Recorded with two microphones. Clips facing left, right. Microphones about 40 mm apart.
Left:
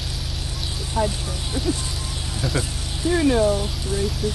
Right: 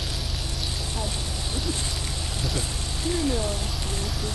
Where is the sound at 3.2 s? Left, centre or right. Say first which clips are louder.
Left 9 dB; left.